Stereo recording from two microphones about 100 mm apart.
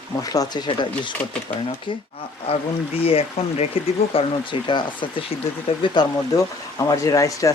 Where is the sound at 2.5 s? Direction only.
85° left.